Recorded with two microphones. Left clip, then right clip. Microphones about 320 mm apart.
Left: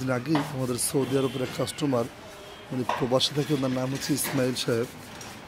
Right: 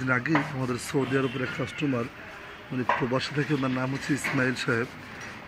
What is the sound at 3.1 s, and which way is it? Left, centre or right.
Speech, centre.